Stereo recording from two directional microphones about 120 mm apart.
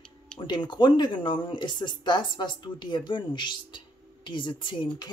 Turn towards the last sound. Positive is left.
turn(degrees=40)  # may be behind; listen again after turning